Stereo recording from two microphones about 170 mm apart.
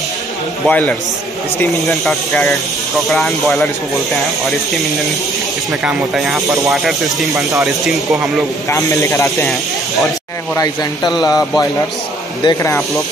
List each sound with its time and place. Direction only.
0.7 s speech: 10° left (ahead or behind)
5.7 s speech: centre (ahead or behind)
8.6 s speech: 20° left (ahead or behind)
10.5 s speech: 20° left (ahead or behind)